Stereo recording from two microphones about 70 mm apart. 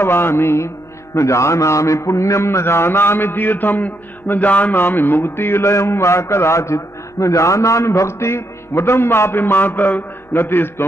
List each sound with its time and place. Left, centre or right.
0.0 s mantra: left